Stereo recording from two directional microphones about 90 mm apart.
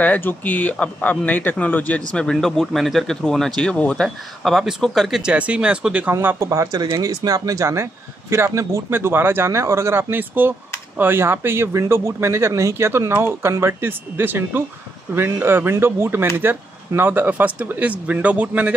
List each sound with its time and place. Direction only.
0.0 s speech: 20° left (ahead or behind)
4.4 s speech: 5° right (ahead or behind)
5.3 s speech: 15° right (ahead or behind)
6.2 s speech: 35° right (ahead or behind); by 18.7 s 15° right (ahead or behind)